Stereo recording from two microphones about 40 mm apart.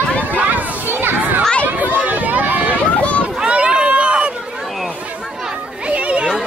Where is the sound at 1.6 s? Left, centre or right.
Right.